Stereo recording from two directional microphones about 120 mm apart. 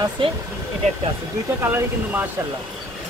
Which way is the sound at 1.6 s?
15° right (ahead or behind).